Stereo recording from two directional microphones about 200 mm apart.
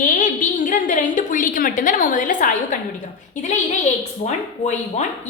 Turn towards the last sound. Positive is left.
turn(degrees=35)  # may be behind; listen again after turning